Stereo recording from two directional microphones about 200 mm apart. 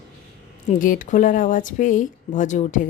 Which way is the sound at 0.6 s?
40° left (ahead or behind).